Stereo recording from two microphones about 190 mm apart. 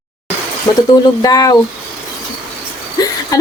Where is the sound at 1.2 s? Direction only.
20° left (ahead or behind).